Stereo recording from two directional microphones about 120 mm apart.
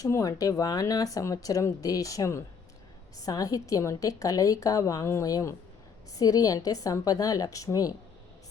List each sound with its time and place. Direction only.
0.0 s a woman's voice: 30° left (ahead or behind)